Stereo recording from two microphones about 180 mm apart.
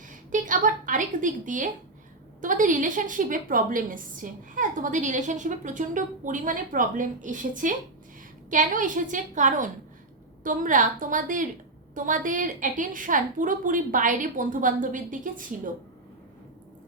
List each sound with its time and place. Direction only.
0.1 s a woman's voice: 45° right (ahead or behind)